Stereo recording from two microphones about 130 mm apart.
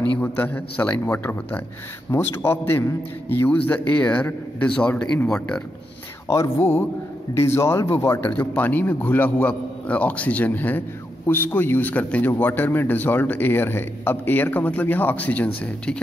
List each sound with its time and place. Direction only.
0.2 s a man's voice: 15° left (ahead or behind)
6.2 s a man's voice: 20° left (ahead or behind)